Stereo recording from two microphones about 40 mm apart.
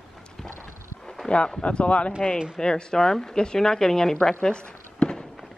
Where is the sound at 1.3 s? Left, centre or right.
Left.